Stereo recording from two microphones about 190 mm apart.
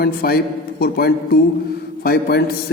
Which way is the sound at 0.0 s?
55° left (ahead or behind).